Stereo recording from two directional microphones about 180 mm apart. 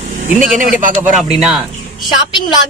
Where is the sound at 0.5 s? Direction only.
45° right (ahead or behind).